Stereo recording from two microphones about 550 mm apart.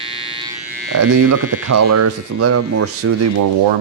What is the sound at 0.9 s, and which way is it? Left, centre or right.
Speech, right.